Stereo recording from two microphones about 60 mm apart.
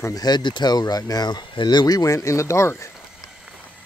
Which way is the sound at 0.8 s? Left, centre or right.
Left.